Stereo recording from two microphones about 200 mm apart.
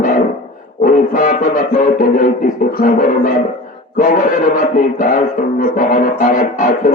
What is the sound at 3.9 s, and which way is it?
Speech, 40° left (ahead or behind).